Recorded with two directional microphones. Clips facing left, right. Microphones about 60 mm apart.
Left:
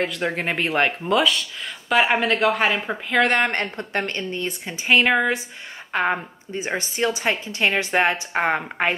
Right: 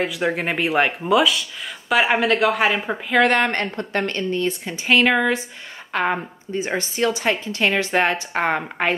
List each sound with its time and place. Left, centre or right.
0.0 s speech: centre
3.7 s speech: centre